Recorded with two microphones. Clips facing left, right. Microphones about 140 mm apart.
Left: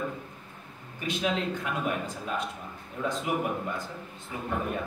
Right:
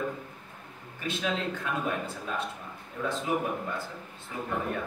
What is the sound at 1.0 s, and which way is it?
Speech, 15° left (ahead or behind).